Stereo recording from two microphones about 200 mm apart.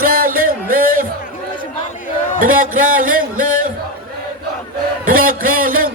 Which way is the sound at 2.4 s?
45° right (ahead or behind).